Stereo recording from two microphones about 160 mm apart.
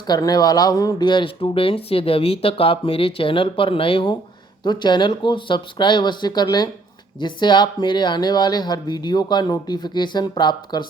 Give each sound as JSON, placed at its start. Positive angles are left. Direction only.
{"t": 0.1, "sound": "speech", "side_deg": 25}